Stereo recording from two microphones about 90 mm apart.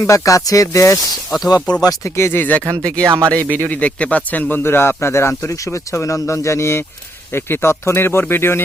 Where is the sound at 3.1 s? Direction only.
35° right (ahead or behind).